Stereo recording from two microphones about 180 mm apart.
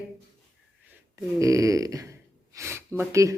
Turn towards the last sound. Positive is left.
turn(degrees=-15)  # may be behind; listen again after turning